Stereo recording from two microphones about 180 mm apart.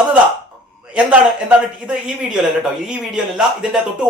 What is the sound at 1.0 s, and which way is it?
A man's voice, 5° right (ahead or behind).